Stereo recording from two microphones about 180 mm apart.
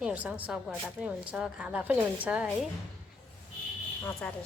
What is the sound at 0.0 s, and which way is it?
A woman's voice, 5° right (ahead or behind).